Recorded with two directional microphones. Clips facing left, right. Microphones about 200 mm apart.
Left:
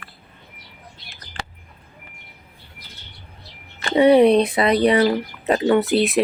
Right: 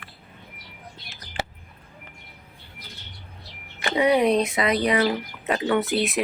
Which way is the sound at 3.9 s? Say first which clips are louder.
Left 7 dB; 30° left (ahead or behind).